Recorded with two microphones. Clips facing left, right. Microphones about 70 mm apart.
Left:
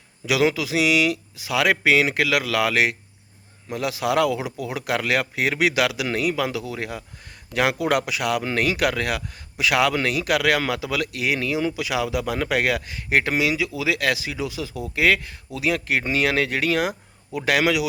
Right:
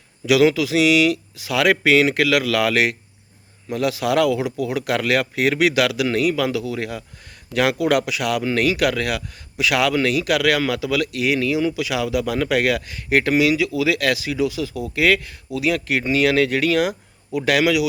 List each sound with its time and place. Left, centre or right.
0.3 s speech: left